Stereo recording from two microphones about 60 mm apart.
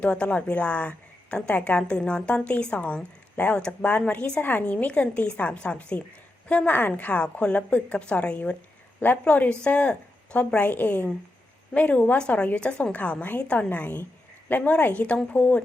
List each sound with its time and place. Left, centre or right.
0.0 s a woman's voice: centre
6.7 s a woman's voice: left